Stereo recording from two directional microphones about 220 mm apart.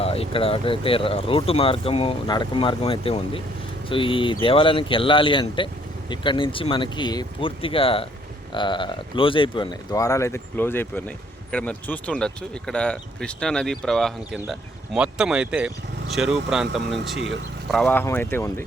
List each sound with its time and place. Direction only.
0.0 s speech: 25° left (ahead or behind); by 16.4 s centre (ahead or behind)
17.2 s speech: 55° right (ahead or behind)
17.7 s speech: 5° left (ahead or behind)